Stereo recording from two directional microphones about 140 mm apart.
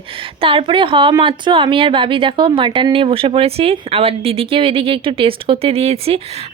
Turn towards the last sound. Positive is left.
turn(degrees=-45)  # may be behind; listen again after turning